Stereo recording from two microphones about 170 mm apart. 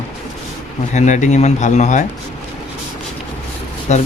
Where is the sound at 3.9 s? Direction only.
40° left (ahead or behind).